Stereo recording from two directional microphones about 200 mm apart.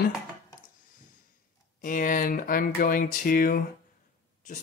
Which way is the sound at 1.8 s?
40° left (ahead or behind).